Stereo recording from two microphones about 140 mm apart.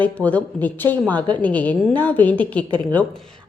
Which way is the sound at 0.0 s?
10° left (ahead or behind).